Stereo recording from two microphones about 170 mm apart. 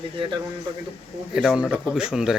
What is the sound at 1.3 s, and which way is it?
Speech, 5° right (ahead or behind).